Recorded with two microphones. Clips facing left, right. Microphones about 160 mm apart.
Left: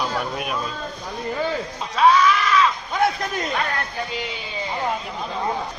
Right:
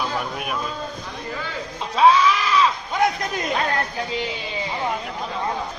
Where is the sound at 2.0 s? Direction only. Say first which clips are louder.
Even; 30° right (ahead or behind).